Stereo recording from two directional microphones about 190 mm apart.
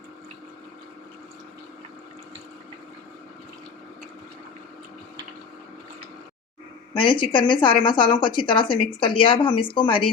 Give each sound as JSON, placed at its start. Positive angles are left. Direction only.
{"t": 6.9, "sound": "speech", "side_deg": 25}